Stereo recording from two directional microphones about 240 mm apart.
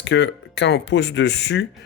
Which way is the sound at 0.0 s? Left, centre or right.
Left.